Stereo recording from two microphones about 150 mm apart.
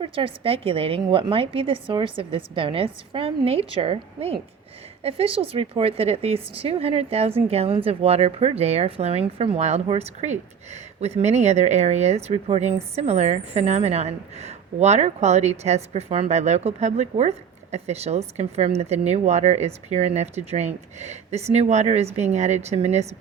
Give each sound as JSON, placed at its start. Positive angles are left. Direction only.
{"t": 0.0, "sound": "a woman's voice", "side_deg": -35}